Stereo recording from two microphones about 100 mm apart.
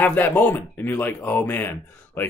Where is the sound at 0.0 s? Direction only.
20° left (ahead or behind).